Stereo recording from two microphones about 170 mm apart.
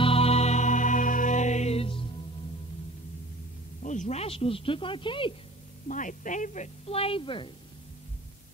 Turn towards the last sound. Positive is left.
turn(degrees=30)  # may be behind; listen again after turning